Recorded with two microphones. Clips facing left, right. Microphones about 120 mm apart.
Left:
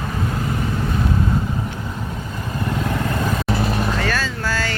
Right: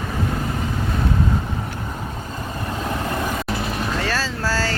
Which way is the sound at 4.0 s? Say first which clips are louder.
Left 1 dB; 30° right (ahead or behind).